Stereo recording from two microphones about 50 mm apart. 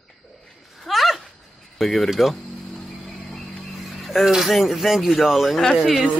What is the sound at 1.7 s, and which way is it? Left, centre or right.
Speech, centre.